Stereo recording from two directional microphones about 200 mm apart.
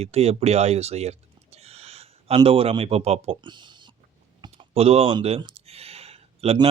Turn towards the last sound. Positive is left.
turn(degrees=-30)  # may be behind; listen again after turning